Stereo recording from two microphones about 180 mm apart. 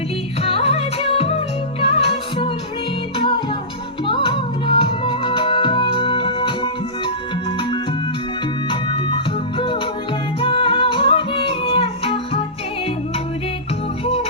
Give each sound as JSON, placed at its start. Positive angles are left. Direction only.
{"t": 0.4, "sound": "music", "side_deg": 30}
{"t": 4.0, "sound": "music", "side_deg": 30}
{"t": 8.7, "sound": "music", "side_deg": 30}
{"t": 14.0, "sound": "music", "side_deg": 35}